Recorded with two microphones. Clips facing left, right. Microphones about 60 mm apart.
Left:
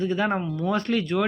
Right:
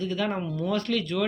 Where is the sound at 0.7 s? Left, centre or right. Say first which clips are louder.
Left 3 dB; left.